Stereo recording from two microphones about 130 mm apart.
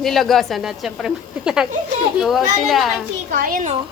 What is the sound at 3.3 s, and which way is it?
Speech, 90° right.